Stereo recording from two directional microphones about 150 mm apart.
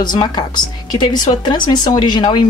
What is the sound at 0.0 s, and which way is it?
Speech, 30° left (ahead or behind).